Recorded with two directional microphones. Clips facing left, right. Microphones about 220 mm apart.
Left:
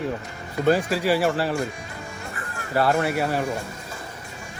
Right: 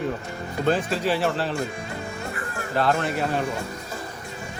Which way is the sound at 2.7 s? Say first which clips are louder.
Left 2 dB; 10° left (ahead or behind).